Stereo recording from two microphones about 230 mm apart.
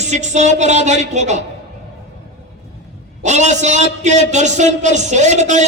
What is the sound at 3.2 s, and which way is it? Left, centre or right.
A man's voice, right.